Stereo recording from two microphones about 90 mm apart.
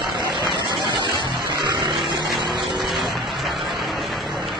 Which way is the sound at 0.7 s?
55° right (ahead or behind).